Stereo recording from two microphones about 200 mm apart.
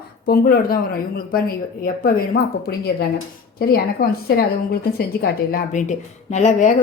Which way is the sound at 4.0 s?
45° left (ahead or behind).